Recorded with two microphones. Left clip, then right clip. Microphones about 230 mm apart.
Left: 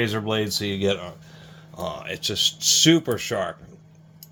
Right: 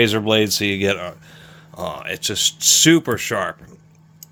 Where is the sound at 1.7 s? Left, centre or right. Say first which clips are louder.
Right 4 dB; right.